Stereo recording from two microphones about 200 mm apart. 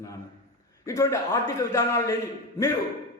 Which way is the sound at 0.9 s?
15° left (ahead or behind).